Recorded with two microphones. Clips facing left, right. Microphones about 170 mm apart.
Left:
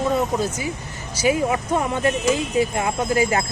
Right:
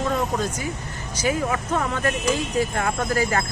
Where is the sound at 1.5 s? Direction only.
20° left (ahead or behind).